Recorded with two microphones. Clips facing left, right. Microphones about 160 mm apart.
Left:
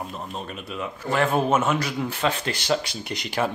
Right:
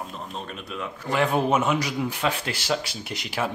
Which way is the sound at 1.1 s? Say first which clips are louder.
Left 1 dB; 15° right (ahead or behind).